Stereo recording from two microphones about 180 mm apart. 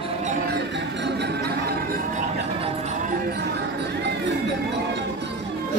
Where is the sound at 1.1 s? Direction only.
65° right (ahead or behind).